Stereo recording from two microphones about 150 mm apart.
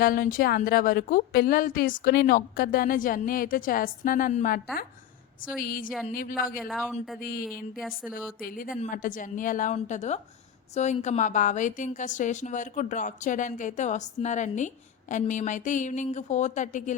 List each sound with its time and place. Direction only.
0.0 s a woman's voice: 70° left (ahead or behind)
5.5 s a woman's voice: 70° left (ahead or behind)
6.6 s speech: centre (ahead or behind)
7.2 s a woman's voice: 75° left (ahead or behind)
7.8 s speech: 5° right (ahead or behind)
8.4 s a woman's voice: 70° left (ahead or behind)